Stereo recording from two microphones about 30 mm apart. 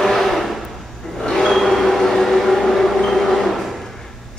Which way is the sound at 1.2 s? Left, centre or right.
Left.